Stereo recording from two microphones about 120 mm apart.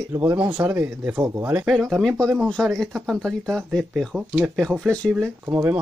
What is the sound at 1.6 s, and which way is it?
Speech, centre (ahead or behind).